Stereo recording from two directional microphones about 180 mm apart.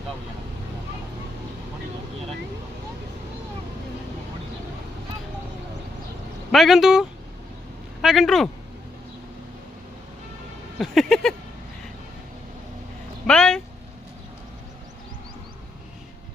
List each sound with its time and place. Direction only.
6.5 s speech: centre (ahead or behind)
8.0 s speech: centre (ahead or behind)
10.8 s speech: centre (ahead or behind)
13.2 s a sound: 5° left (ahead or behind)